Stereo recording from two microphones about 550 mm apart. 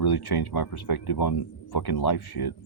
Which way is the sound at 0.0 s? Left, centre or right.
Left.